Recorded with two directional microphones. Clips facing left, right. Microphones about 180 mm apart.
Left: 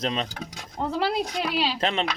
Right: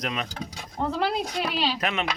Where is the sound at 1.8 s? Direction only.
30° left (ahead or behind).